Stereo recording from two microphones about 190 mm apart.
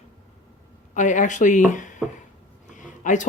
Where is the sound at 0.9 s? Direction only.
40° left (ahead or behind).